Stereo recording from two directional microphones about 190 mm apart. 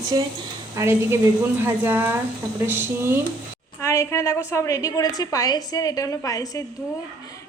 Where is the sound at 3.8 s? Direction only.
15° left (ahead or behind).